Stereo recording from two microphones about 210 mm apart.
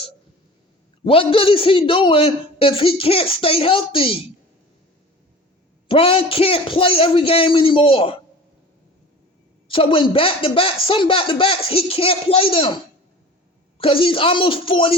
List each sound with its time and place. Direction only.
1.0 s a man's voice: 25° left (ahead or behind)
5.9 s a man's voice: 25° left (ahead or behind)
9.6 s a man's voice: 25° left (ahead or behind)
13.7 s a man's voice: 25° left (ahead or behind)